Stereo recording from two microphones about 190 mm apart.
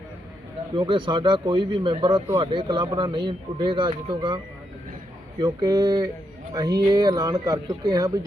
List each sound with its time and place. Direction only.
0.7 s speech: 25° right (ahead or behind)
5.4 s speech: 20° right (ahead or behind)